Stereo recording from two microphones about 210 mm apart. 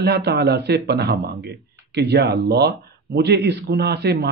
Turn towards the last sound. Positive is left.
turn(degrees=-50)  # may be behind; listen again after turning